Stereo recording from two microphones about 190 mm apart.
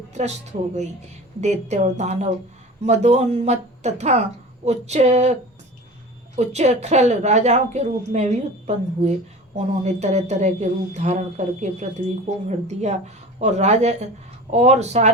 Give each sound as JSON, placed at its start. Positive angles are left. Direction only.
{"t": 0.1, "sound": "speech", "side_deg": -35}
{"t": 1.4, "sound": "speech", "side_deg": -35}